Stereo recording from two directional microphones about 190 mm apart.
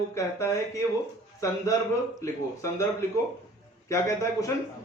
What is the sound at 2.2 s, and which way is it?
Speech, 15° left (ahead or behind).